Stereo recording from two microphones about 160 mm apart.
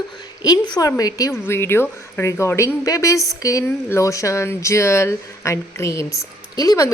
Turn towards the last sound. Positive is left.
turn(degrees=20)  # may be behind; listen again after turning